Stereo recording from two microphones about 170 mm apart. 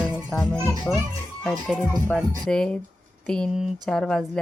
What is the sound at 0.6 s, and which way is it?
Speech, 15° right (ahead or behind).